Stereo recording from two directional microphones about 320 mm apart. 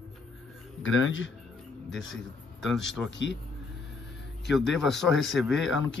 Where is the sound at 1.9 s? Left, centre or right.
Centre.